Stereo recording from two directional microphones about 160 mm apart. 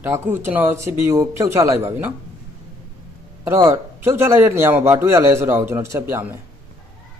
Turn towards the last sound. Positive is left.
turn(degrees=-15)  # may be behind; listen again after turning